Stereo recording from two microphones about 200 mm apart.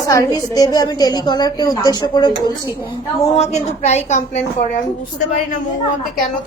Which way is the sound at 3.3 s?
35° left (ahead or behind).